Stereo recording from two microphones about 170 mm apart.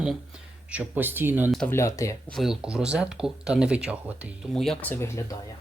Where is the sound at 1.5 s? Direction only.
5° left (ahead or behind).